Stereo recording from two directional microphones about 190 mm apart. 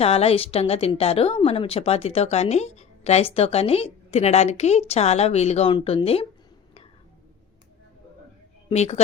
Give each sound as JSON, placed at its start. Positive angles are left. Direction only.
{"t": 0.0, "sound": "a woman's voice", "side_deg": 30}
{"t": 8.7, "sound": "a woman's voice", "side_deg": 35}